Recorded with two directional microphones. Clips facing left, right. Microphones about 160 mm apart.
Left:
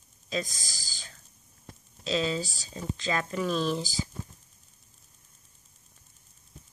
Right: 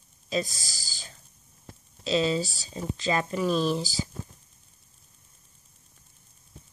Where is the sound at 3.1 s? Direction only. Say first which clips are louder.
Right 4 dB; 20° right (ahead or behind).